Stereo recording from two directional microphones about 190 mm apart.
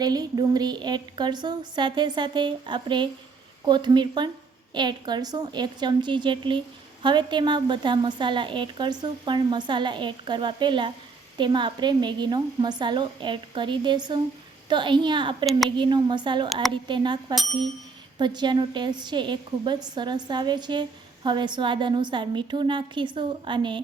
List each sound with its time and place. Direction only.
0.0 s a woman's voice: 20° right (ahead or behind)